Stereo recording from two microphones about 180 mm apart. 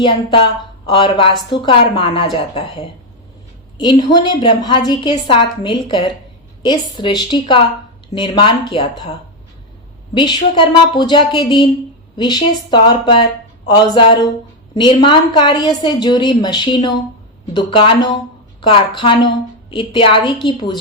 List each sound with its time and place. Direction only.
0.0 s a woman's voice: 30° left (ahead or behind)
3.9 s a woman's voice: 25° left (ahead or behind)
10.2 s a woman's voice: 25° left (ahead or behind)